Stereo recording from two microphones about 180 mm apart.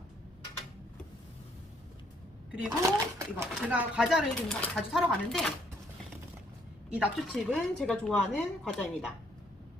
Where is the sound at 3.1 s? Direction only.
15° right (ahead or behind).